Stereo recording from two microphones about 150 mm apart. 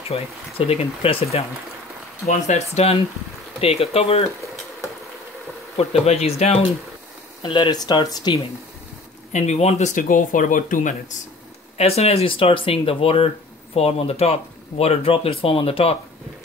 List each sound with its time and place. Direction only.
0.1 s speech: 40° left (ahead or behind)
5.8 s speech: 45° left (ahead or behind)
7.4 s speech: 30° left (ahead or behind)
9.3 s speech: 50° left (ahead or behind)
11.8 s speech: 40° left (ahead or behind)